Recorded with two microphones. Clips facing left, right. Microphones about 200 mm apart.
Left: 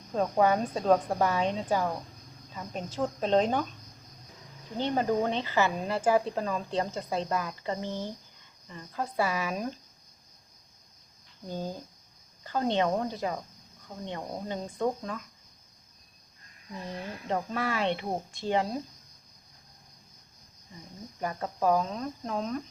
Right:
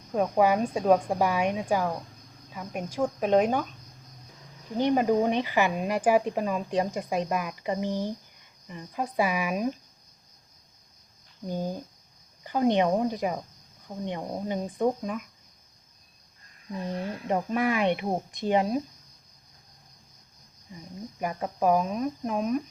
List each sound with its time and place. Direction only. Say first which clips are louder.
0.1 s speech: right 2 dB; 10° right (ahead or behind)
4.8 s speech: right 4 dB; 15° right (ahead or behind)
11.4 s speech: right 4 dB; 15° right (ahead or behind)
17.2 s speech: right 5 dB; 15° right (ahead or behind)
21.2 s speech: right 2 dB; 15° right (ahead or behind)